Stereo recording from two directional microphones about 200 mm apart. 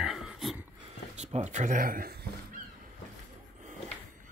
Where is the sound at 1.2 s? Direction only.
35° right (ahead or behind).